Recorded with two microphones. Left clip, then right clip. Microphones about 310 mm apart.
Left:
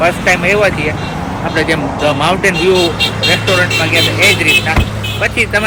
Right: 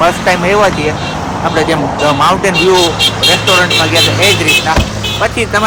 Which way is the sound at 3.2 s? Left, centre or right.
Centre.